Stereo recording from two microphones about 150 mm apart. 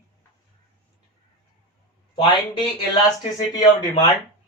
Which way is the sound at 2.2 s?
30° left (ahead or behind).